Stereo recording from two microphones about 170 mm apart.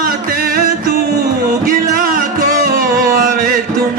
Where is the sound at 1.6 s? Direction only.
55° right (ahead or behind).